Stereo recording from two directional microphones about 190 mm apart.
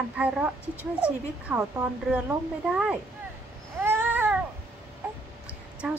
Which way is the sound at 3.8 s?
10° right (ahead or behind).